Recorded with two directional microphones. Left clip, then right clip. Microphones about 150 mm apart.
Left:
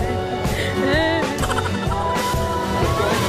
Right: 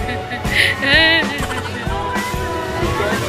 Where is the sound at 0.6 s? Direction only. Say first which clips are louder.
Right 8 dB; 35° left (ahead or behind).